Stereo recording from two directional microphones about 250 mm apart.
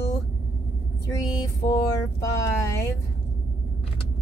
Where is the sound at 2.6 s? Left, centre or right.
Centre.